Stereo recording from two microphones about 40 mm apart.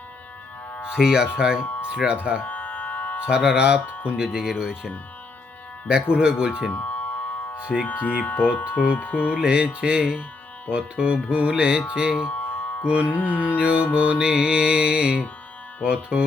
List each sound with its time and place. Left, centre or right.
0.7 s music: left
0.9 s music: centre
2.0 s speech: centre
2.4 s music: left
3.2 s music: right
4.2 s speech: centre
5.9 s music: right
6.7 s a sound: left
7.7 s speech: left
9.3 s music: right
12.1 s music: left
12.8 s music: right